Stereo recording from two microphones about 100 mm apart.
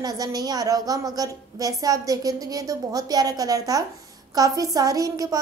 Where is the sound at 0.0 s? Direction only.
40° right (ahead or behind).